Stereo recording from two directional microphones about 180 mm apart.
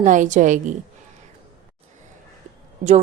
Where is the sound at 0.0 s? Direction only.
45° right (ahead or behind).